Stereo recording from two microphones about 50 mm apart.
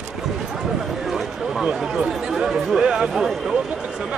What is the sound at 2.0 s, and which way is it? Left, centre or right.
Chatter, centre.